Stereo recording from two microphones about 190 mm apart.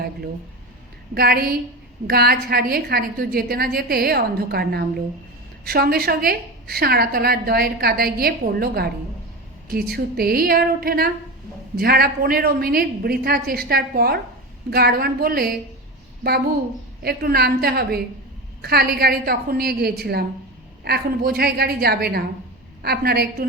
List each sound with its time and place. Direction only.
1.1 s a woman's voice: 55° right (ahead or behind)
17.0 s a woman's voice: 55° right (ahead or behind)